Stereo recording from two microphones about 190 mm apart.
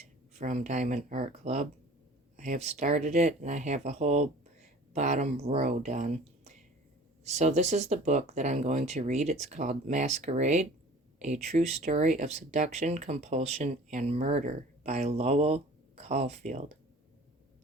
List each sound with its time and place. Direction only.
0.3 s speech: 35° right (ahead or behind)